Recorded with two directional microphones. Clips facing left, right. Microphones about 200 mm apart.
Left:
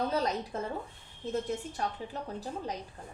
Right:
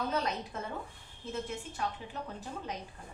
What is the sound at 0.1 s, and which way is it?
A woman's voice, 35° left (ahead or behind).